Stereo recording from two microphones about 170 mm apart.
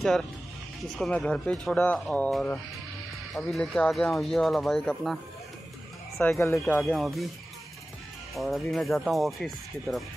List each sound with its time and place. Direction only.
0.9 s speech: 5° left (ahead or behind)
8.4 s speech: centre (ahead or behind)